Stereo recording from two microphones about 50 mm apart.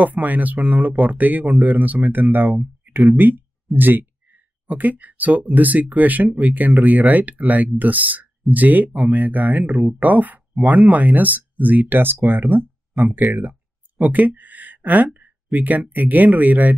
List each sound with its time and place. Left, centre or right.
0.0 s speech: right
2.8 s a sound: right
3.2 s speech: right